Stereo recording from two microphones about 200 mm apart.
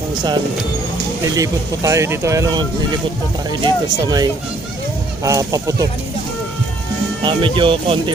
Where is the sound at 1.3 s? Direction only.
15° right (ahead or behind).